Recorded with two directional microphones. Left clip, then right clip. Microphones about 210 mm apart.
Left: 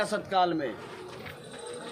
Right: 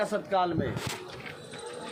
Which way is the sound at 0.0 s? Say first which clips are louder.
Left 1 dB; 45° left (ahead or behind).